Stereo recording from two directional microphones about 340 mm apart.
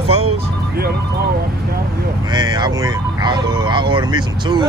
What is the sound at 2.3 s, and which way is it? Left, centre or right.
Speech, centre.